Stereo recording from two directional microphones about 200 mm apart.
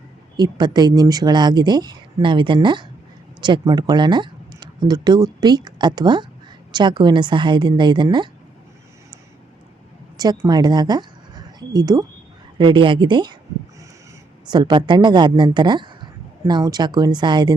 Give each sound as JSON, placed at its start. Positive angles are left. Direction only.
{"t": 0.3, "sound": "speech", "side_deg": -20}
{"t": 10.4, "sound": "speech", "side_deg": -20}
{"t": 14.5, "sound": "speech", "side_deg": -20}